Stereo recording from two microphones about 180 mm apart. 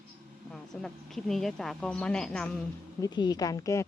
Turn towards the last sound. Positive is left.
turn(degrees=15)  # may be behind; listen again after turning